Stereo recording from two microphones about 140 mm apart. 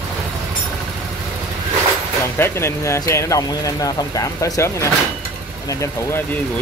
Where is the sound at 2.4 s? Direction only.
20° left (ahead or behind).